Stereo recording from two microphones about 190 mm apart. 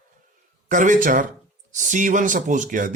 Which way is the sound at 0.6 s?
40° right (ahead or behind).